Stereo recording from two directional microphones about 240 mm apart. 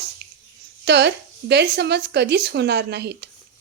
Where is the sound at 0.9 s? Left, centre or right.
Right.